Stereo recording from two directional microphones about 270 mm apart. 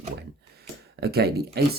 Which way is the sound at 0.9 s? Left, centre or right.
Right.